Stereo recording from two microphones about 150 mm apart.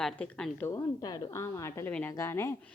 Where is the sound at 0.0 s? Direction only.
5° left (ahead or behind).